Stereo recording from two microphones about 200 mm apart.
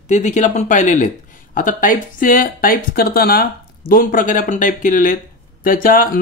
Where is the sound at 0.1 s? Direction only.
35° left (ahead or behind).